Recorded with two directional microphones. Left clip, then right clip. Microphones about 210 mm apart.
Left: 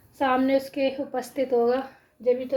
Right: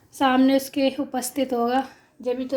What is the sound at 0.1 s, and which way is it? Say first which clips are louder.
A woman's voice: right 3 dB; 50° right (ahead or behind).